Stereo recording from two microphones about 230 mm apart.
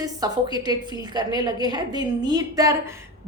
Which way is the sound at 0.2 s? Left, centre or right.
Centre.